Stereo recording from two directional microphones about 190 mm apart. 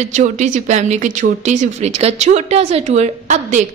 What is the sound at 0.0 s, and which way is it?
Speech, 40° right (ahead or behind).